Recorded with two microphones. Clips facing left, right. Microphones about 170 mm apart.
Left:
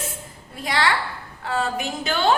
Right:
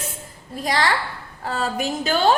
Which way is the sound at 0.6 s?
40° right (ahead or behind).